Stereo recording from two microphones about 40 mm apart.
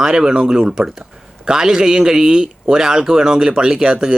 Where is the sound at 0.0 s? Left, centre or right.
Centre.